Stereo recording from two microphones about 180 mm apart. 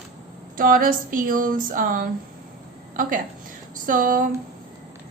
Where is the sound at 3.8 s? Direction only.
50° right (ahead or behind).